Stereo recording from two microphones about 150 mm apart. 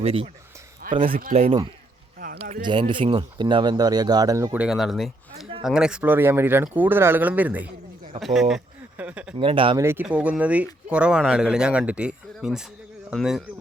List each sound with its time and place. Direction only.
0.0 s speech: 40° right (ahead or behind)
2.1 s a sound: 80° right
2.6 s speech: 35° right (ahead or behind)
4.5 s speech: 5° right (ahead or behind)
9.4 s speech: 35° right (ahead or behind)
9.7 s speech: 15° right (ahead or behind)